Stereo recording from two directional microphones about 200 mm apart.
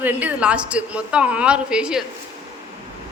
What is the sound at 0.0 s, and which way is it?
A woman's voice, 10° right (ahead or behind).